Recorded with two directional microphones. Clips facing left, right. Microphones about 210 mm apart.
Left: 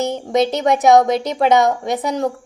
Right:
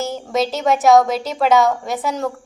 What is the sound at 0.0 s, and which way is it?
A woman's voice, 20° left (ahead or behind).